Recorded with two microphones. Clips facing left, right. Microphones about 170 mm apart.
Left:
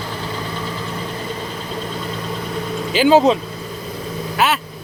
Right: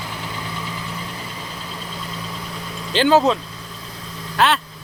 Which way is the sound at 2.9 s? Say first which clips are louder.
Left 3 dB; 15° left (ahead or behind).